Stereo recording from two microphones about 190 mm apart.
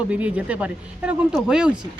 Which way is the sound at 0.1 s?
5° right (ahead or behind).